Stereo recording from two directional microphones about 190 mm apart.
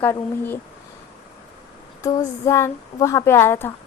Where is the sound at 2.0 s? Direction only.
15° left (ahead or behind).